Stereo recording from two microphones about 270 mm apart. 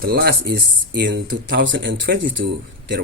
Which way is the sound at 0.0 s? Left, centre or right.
Right.